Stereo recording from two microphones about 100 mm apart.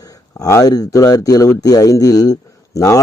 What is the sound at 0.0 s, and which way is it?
Speech, 35° left (ahead or behind).